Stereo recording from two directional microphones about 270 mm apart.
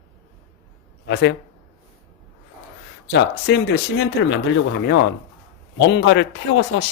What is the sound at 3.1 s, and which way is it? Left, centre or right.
Speech, left.